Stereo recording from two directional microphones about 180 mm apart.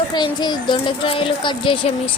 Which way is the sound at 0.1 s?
25° left (ahead or behind).